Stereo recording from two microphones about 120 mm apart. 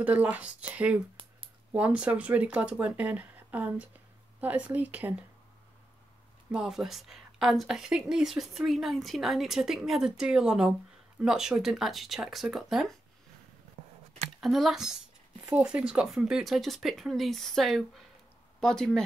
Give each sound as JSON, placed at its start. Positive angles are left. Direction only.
{"t": 0.0, "sound": "speech", "side_deg": -10}
{"t": 6.5, "sound": "a woman's voice", "side_deg": -5}
{"t": 13.8, "sound": "a sound", "side_deg": -70}
{"t": 14.4, "sound": "a woman's voice", "side_deg": 0}